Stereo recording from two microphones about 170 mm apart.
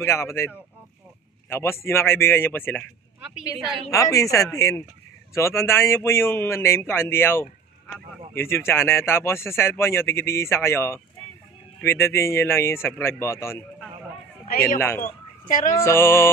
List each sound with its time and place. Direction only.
0.0 s speech: 15° left (ahead or behind)
3.2 s a sound: 5° right (ahead or behind)
3.9 s speech: 20° left (ahead or behind)
14.8 s speech: 15° left (ahead or behind)
15.4 s speech: 50° left (ahead or behind)
15.8 s speech: 15° left (ahead or behind)